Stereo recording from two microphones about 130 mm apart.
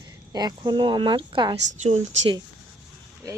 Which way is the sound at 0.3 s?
30° right (ahead or behind).